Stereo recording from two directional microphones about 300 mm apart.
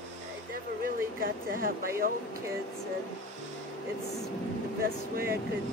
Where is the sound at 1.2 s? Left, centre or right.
Right.